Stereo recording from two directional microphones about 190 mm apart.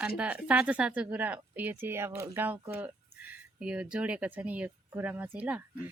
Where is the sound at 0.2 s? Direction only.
5° right (ahead or behind).